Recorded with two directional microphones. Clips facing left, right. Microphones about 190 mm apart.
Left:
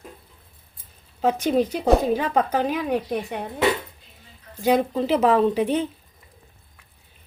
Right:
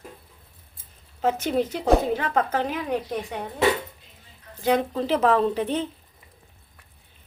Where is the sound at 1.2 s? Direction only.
15° left (ahead or behind).